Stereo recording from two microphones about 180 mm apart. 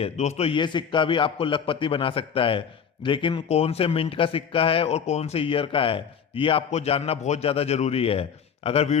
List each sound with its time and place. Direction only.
0.0 s a man's voice: 35° left (ahead or behind)